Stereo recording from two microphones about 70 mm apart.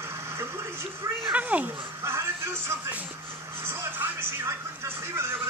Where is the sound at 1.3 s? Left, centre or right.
Right.